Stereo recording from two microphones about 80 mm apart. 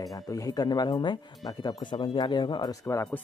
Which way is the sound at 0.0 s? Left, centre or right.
Left.